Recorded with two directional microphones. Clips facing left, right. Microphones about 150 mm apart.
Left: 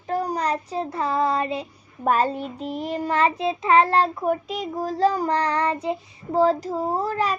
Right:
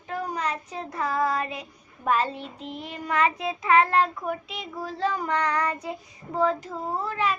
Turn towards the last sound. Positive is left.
turn(degrees=40)  # may be behind; listen again after turning